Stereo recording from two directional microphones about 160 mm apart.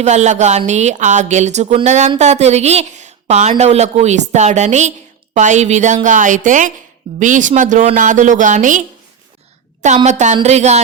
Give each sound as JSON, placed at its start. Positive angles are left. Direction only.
{"t": 0.0, "sound": "speech", "side_deg": -45}